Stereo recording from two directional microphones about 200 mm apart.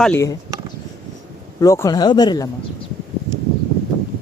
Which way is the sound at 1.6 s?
15° left (ahead or behind).